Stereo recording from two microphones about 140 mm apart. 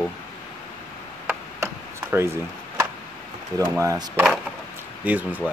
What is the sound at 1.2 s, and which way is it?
Chop, 15° right (ahead or behind).